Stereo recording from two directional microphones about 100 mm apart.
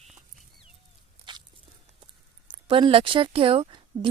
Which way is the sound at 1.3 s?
50° right (ahead or behind).